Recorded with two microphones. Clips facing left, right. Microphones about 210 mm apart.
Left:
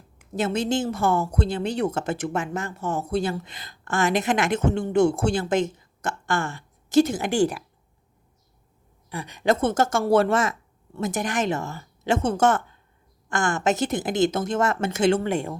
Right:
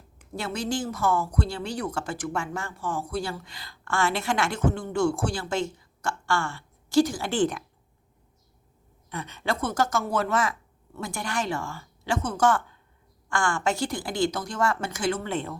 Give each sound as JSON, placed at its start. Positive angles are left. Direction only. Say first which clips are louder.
{"t": 0.3, "sound": "speech", "louder": "left 6 dB", "side_deg": 20}
{"t": 9.0, "sound": "speech", "louder": "left 7 dB", "side_deg": 10}
{"t": 15.3, "sound": "speech", "louder": "left 4 dB", "side_deg": 15}